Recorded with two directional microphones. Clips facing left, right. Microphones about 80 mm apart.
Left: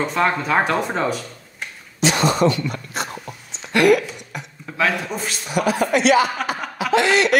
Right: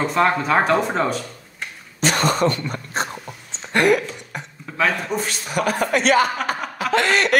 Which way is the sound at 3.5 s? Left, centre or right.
Right.